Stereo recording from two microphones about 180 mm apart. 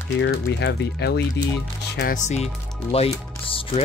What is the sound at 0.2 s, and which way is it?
Speech, 75° left (ahead or behind).